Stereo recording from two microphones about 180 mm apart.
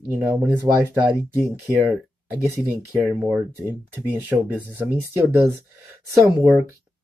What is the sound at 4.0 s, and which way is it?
Speech, 10° right (ahead or behind).